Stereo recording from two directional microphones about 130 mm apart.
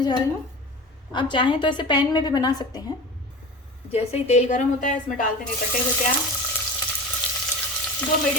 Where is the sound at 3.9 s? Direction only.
55° left (ahead or behind); by 5.3 s 75° left (ahead or behind).